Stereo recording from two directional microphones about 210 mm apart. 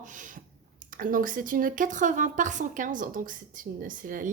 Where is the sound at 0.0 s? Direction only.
40° right (ahead or behind).